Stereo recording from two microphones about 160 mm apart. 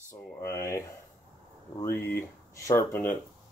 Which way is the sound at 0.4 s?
20° left (ahead or behind).